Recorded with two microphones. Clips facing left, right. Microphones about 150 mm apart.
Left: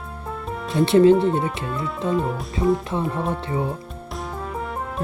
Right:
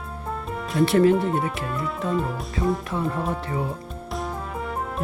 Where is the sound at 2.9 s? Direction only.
20° left (ahead or behind).